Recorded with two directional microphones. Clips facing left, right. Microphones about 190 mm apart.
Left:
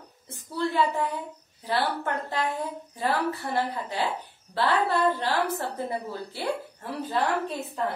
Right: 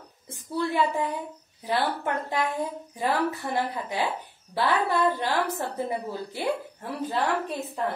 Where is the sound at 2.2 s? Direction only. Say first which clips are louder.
Right 1 dB; 15° right (ahead or behind).